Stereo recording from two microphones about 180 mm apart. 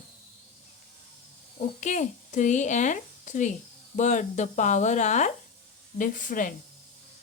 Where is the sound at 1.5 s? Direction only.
45° left (ahead or behind).